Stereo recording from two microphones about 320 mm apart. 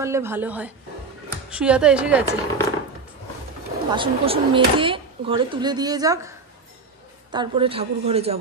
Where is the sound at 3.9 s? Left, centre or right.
Centre.